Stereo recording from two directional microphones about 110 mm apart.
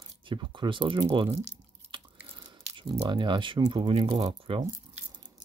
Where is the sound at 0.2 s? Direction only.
50° right (ahead or behind).